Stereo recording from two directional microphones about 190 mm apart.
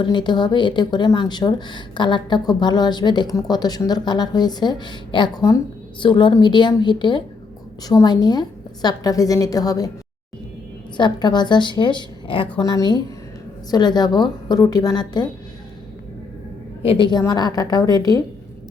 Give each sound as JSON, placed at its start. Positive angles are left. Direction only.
{"t": 0.0, "sound": "speech", "side_deg": 25}
{"t": 10.9, "sound": "speech", "side_deg": 25}
{"t": 16.8, "sound": "speech", "side_deg": 30}